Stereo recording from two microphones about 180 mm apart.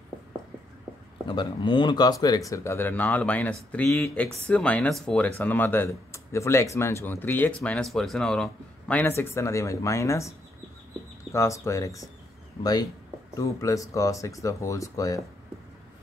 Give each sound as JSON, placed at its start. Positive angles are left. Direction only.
{"t": 1.2, "sound": "speech", "side_deg": 25}
{"t": 11.3, "sound": "speech", "side_deg": 15}
{"t": 13.4, "sound": "speech", "side_deg": 20}